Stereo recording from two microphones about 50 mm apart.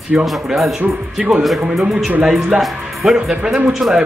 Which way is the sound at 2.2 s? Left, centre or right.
Centre.